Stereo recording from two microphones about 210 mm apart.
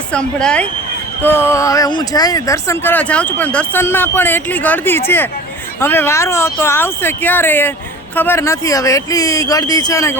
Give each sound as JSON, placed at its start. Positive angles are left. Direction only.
{"t": 0.1, "sound": "speech", "side_deg": 5}